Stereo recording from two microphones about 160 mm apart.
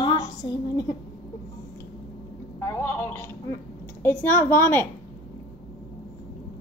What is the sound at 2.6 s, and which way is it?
A woman's voice, 15° left (ahead or behind).